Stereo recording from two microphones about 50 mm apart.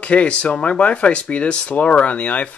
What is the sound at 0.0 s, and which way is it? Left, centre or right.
Speech, left.